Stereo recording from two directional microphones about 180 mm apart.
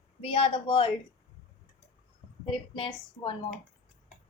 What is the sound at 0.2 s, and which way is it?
Speech, 30° left (ahead or behind).